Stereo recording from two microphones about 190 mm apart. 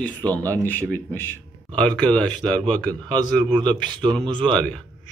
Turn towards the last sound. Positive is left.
turn(degrees=5)  # may be behind; listen again after turning